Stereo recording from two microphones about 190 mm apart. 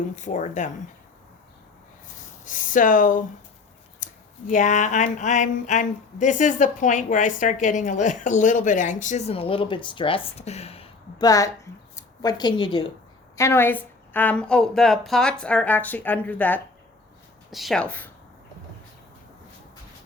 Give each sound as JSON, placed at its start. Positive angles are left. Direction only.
{"t": 0.2, "sound": "speech", "side_deg": 40}
{"t": 2.4, "sound": "speech", "side_deg": 45}
{"t": 11.3, "sound": "a woman's voice", "side_deg": 15}
{"t": 13.3, "sound": "a woman's voice", "side_deg": 15}